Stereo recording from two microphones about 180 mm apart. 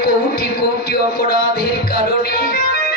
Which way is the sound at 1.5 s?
55° left (ahead or behind).